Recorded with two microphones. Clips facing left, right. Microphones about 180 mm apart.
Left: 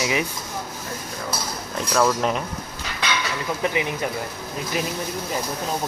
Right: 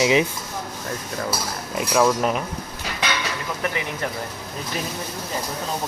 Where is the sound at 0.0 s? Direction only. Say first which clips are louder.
Right 6 dB; 20° right (ahead or behind).